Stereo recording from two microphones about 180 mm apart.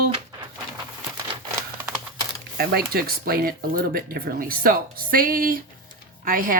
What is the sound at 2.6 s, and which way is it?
Speech, 60° right (ahead or behind).